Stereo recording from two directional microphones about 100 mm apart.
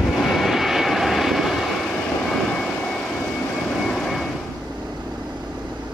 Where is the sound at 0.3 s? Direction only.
Centre (ahead or behind).